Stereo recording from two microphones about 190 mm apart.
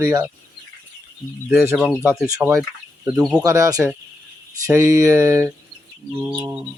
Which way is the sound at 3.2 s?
Centre (ahead or behind).